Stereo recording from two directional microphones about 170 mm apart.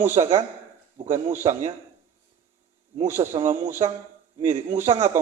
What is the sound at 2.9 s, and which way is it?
Speech, 45° right (ahead or behind).